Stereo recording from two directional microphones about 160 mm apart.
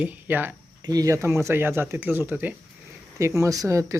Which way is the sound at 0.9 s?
20° right (ahead or behind).